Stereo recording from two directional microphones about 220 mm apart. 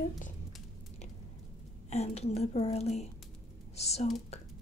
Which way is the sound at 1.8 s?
30° left (ahead or behind).